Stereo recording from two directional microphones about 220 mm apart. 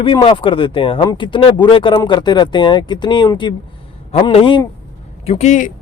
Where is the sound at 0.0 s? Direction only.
25° left (ahead or behind).